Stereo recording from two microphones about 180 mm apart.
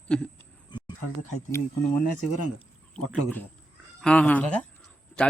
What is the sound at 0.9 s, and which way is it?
Speech, 40° left (ahead or behind).